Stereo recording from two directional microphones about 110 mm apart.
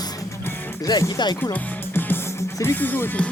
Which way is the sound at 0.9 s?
35° left (ahead or behind).